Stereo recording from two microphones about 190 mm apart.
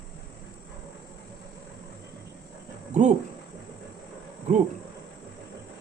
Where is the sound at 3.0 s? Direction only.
40° right (ahead or behind).